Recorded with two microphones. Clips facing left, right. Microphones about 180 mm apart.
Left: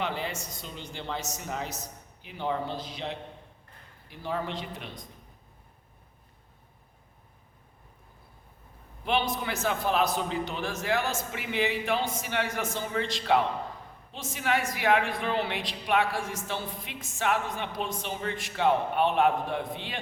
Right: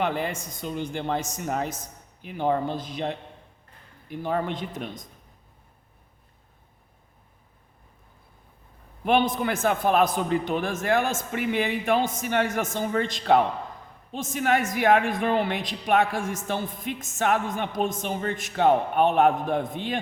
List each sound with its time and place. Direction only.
0.0 s a woman's voice: 50° right (ahead or behind)
9.0 s a woman's voice: 50° right (ahead or behind)